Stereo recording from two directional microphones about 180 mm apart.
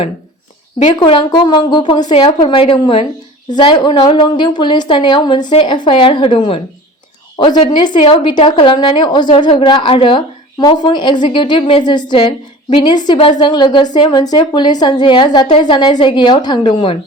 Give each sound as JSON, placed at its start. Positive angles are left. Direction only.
{"t": 0.9, "sound": "a woman's voice", "side_deg": 25}